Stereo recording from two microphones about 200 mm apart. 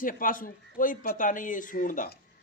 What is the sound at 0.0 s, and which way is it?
Speech, 45° left (ahead or behind).